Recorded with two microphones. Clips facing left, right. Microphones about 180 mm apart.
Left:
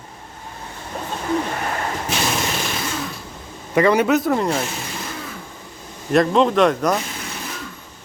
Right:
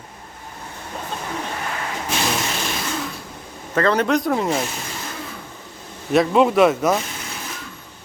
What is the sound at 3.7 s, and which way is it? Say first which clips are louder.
Speech: left 3 dB; 10° left (ahead or behind).